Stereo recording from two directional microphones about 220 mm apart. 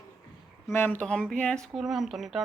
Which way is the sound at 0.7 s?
10° left (ahead or behind).